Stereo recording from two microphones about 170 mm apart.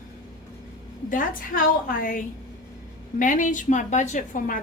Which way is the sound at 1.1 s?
55° left (ahead or behind).